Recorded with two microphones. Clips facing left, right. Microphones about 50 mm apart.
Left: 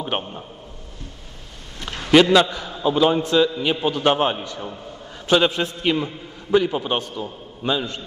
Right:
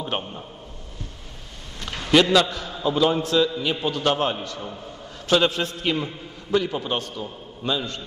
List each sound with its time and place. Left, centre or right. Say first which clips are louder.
0.0 s a man's voice: left 2 dB; left
1.9 s a sound: left 4 dB; centre
2.5 s a man's voice: left 3 dB; centre
3.4 s a man's voice: left 3 dB; centre
3.8 s a man's voice: left 4 dB; centre